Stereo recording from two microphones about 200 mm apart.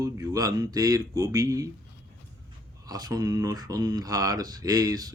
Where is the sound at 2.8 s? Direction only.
20° right (ahead or behind).